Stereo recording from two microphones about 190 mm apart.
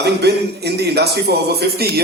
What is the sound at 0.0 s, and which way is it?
A man's voice, 60° right (ahead or behind).